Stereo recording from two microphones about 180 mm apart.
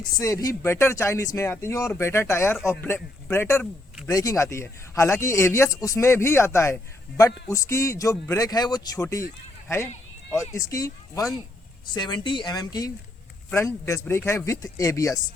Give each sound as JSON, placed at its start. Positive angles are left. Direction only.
{"t": 0.0, "sound": "speech", "side_deg": 20}